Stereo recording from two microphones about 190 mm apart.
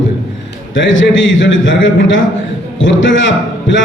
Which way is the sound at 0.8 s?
80° left.